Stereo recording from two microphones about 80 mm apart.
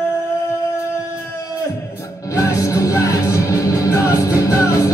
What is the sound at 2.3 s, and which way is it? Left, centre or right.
Music, left.